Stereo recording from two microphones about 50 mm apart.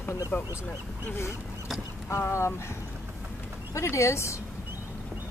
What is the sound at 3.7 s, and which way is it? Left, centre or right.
Speech, left.